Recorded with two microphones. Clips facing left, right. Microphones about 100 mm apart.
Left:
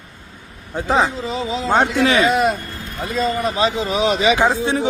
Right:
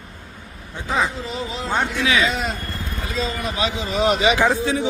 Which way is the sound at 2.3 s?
60° left (ahead or behind).